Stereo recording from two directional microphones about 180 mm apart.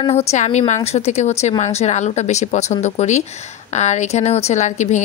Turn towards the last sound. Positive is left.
turn(degrees=40)  # may be behind; listen again after turning